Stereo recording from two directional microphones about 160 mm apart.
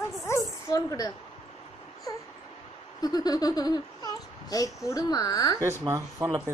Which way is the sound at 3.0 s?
25° left (ahead or behind).